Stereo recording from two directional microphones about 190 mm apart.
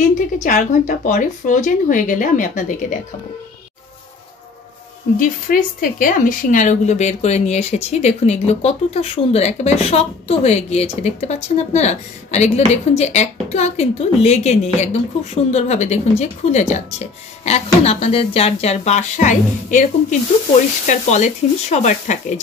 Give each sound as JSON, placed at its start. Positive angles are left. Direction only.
{"t": 0.0, "sound": "speech", "side_deg": 40}
{"t": 5.2, "sound": "speech", "side_deg": 45}